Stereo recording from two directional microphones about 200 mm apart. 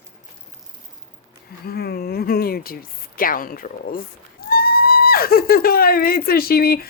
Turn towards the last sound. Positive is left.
turn(degrees=50)  # may be behind; listen again after turning